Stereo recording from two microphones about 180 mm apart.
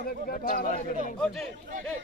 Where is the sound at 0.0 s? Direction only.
55° left (ahead or behind).